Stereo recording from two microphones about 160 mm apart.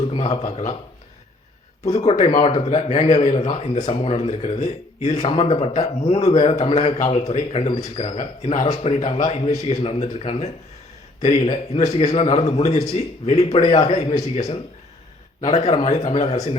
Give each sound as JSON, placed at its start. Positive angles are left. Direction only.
{"t": 0.0, "sound": "speech", "side_deg": 40}
{"t": 2.0, "sound": "a man's voice", "side_deg": 45}
{"t": 11.8, "sound": "a man's voice", "side_deg": 40}